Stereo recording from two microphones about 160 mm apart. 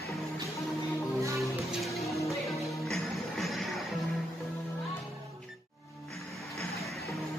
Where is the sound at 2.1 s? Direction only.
20° left (ahead or behind).